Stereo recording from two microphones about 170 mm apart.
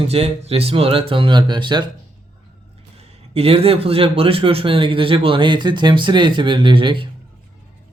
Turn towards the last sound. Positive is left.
turn(degrees=-30)  # may be behind; listen again after turning